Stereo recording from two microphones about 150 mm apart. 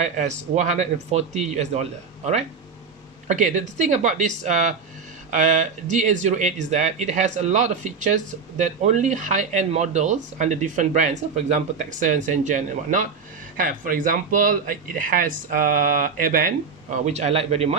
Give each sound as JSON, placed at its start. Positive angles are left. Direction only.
{"t": 0.0, "sound": "speech", "side_deg": -50}
{"t": 17.1, "sound": "speech", "side_deg": -45}